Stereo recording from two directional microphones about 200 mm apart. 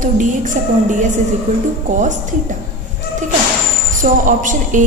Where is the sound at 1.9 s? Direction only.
40° right (ahead or behind).